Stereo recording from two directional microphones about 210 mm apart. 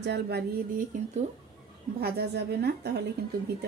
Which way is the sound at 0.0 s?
50° right (ahead or behind).